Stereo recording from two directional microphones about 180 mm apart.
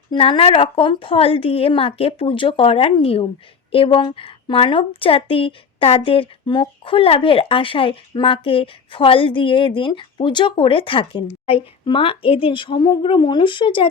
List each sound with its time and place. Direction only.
0.1 s a woman's voice: 30° left (ahead or behind)